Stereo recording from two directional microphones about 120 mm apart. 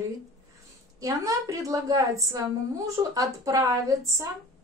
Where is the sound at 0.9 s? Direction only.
30° right (ahead or behind).